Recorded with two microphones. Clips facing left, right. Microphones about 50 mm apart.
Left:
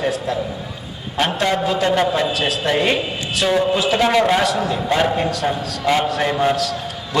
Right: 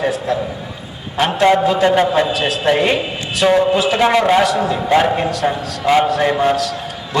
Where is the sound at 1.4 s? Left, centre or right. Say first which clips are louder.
Right 9 dB; right.